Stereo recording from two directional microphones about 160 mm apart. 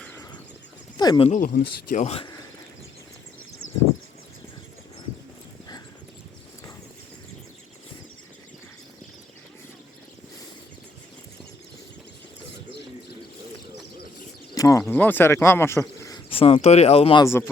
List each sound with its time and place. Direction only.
0.9 s speech: 25° left (ahead or behind)
1.5 s speech: 60° left (ahead or behind)
1.9 s speech: 45° left (ahead or behind)
14.5 s speech: 20° left (ahead or behind)
16.3 s speech: 35° left (ahead or behind)
17.2 s speech: 15° left (ahead or behind)